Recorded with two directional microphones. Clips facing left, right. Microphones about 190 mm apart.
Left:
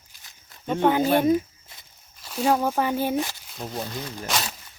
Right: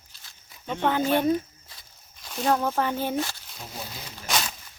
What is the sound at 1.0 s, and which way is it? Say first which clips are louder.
Speech: left 3 dB; 45° left (ahead or behind).